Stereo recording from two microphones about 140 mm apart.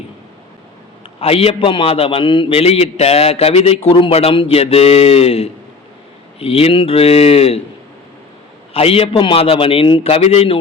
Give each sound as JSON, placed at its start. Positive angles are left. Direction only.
{"t": 1.2, "sound": "a man's voice", "side_deg": 45}
{"t": 8.7, "sound": "a man's voice", "side_deg": 45}